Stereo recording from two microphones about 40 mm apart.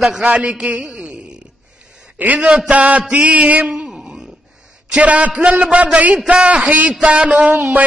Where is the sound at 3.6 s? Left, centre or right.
Right.